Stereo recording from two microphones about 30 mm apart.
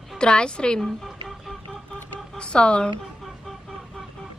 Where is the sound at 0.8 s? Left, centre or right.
Centre.